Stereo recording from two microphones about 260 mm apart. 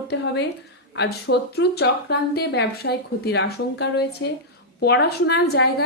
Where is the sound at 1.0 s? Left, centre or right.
Left.